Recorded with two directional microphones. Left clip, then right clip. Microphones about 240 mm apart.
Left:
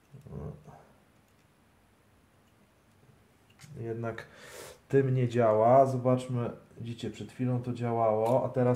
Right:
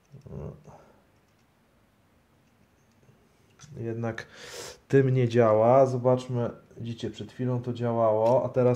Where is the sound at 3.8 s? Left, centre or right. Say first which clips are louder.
Right 3 dB; right.